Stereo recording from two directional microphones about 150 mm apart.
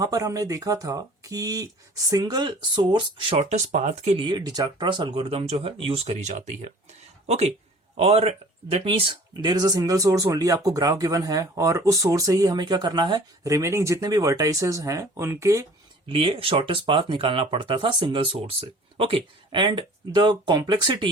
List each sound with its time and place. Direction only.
0.0 s speech: 25° right (ahead or behind)
3.4 s speech: 55° right (ahead or behind)
4.3 s speech: 25° right (ahead or behind)
16.0 s speech: 35° right (ahead or behind)